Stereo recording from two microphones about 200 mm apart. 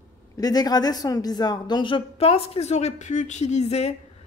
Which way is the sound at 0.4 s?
20° left (ahead or behind).